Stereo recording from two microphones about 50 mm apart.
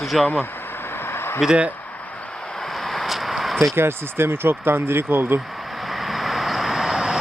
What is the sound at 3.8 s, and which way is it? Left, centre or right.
Speech, right.